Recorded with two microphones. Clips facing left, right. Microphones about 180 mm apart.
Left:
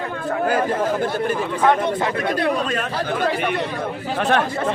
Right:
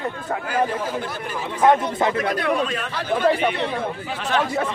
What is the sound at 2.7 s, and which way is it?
A man's voice, 45° left (ahead or behind).